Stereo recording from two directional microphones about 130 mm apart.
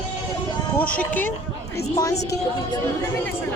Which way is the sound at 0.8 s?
15° left (ahead or behind).